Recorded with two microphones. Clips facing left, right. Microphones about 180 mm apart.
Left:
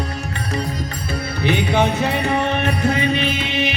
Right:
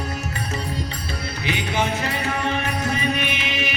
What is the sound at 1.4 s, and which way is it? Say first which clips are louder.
Music: left 7 dB; 60° left (ahead or behind).